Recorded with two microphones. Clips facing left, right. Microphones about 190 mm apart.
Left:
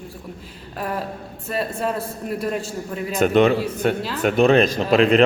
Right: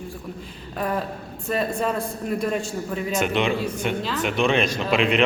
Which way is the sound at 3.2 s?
45° left (ahead or behind).